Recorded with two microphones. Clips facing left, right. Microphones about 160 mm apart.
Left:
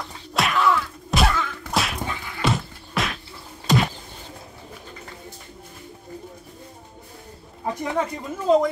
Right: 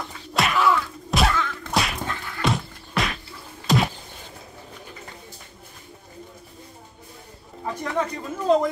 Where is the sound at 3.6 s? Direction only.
Centre (ahead or behind).